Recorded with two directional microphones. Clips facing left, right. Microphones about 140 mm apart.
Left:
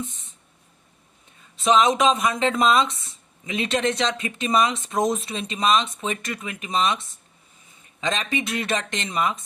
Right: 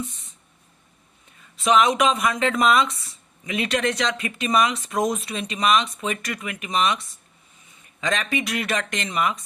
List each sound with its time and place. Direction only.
1.6 s speech: 25° left (ahead or behind)
8.0 s speech: 25° left (ahead or behind)